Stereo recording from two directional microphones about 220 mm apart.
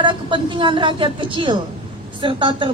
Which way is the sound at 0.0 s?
20° right (ahead or behind).